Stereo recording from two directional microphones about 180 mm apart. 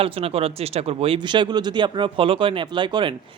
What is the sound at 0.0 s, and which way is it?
Speech, 30° right (ahead or behind).